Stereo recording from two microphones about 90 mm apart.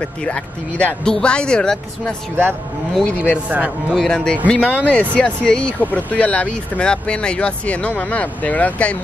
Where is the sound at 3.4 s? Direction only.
15° right (ahead or behind).